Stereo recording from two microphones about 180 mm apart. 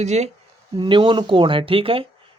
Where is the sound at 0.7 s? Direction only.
25° right (ahead or behind).